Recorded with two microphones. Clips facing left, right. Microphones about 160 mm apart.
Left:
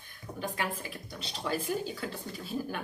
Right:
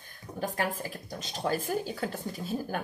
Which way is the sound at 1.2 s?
45° right (ahead or behind).